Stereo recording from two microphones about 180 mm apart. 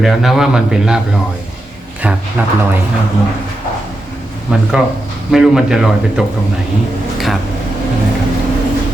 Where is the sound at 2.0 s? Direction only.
5° right (ahead or behind).